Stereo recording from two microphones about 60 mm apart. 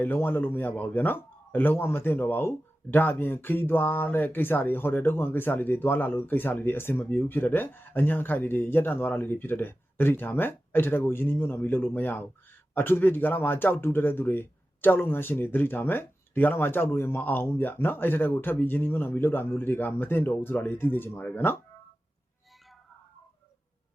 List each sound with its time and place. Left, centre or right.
0.0 s speech: left